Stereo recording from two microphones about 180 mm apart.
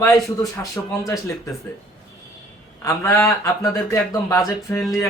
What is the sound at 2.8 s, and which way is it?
Speech, 15° left (ahead or behind).